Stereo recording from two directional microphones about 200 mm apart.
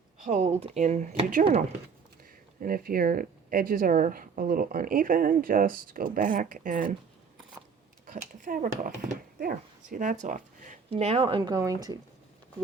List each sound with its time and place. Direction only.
0.3 s speech: 35° right (ahead or behind)
2.6 s speech: 45° right (ahead or behind)
8.0 s speech: 40° right (ahead or behind); by 11.9 s 20° right (ahead or behind)